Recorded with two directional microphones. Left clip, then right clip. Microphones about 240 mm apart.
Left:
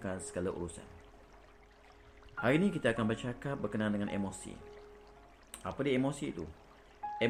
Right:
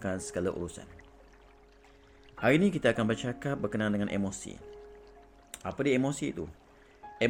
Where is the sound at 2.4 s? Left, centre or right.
Right.